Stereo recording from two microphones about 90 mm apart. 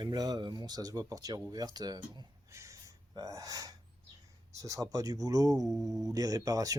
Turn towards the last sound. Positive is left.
turn(degrees=-40)  # may be behind; listen again after turning